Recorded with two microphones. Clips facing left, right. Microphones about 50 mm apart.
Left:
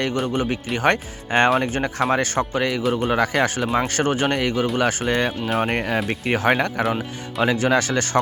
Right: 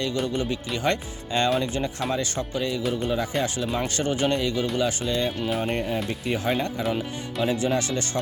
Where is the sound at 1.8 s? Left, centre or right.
Left.